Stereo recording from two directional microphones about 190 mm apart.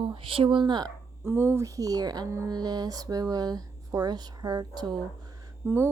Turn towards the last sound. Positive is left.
turn(degrees=-10)  # may be behind; listen again after turning